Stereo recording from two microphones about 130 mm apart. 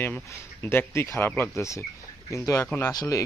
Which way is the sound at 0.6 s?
15° left (ahead or behind).